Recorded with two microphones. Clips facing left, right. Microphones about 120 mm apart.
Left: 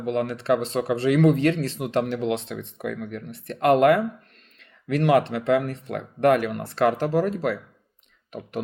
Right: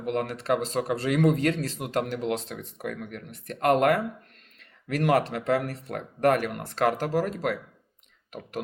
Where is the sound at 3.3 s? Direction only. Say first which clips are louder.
Left 3 dB; 40° right (ahead or behind).